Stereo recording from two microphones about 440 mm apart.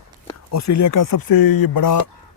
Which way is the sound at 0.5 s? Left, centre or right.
Left.